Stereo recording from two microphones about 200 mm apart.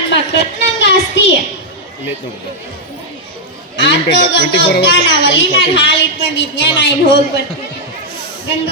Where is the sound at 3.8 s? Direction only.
65° left (ahead or behind).